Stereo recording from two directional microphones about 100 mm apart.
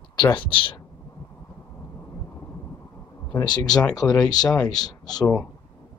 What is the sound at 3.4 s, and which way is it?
Speech, 45° left (ahead or behind).